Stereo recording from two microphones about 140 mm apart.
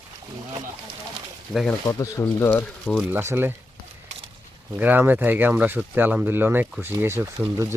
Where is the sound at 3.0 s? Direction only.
15° right (ahead or behind).